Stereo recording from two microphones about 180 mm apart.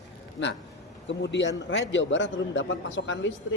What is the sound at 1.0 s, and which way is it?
A man's voice, 80° left.